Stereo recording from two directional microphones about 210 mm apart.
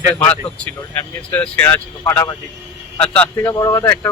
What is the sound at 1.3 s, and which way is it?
Speech, 10° left (ahead or behind).